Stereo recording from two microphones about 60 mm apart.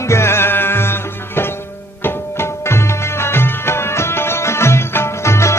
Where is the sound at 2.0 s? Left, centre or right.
Left.